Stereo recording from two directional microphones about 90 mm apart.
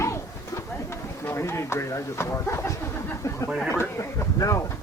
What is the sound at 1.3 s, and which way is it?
Speech, 30° left (ahead or behind).